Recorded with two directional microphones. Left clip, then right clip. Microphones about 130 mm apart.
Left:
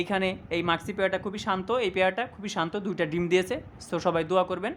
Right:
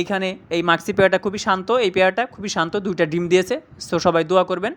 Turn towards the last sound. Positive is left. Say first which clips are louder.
# right 8 dB
turn(degrees=-35)  # may be behind; listen again after turning